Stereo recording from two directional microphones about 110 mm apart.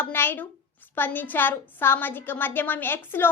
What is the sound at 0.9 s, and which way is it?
A woman's voice, 15° left (ahead or behind).